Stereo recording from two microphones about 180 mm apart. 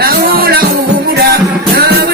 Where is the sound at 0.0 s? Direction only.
55° right (ahead or behind).